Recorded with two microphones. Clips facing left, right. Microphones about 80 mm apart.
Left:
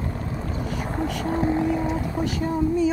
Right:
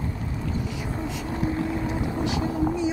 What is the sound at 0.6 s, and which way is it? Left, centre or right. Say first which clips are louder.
Boat: left 4 dB; left.